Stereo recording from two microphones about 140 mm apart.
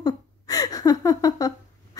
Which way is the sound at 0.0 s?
25° left (ahead or behind).